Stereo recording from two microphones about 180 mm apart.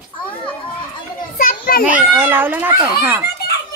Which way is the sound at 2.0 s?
10° right (ahead or behind).